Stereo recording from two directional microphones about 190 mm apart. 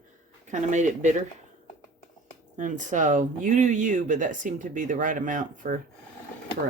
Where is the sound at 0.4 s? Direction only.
40° right (ahead or behind).